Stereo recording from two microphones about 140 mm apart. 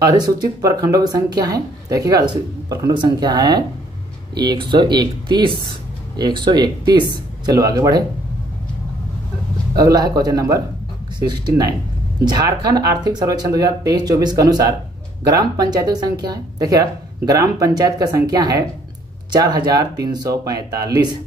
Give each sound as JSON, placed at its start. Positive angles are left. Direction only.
{"t": 0.0, "sound": "speech", "side_deg": -30}
{"t": 9.8, "sound": "speech", "side_deg": -30}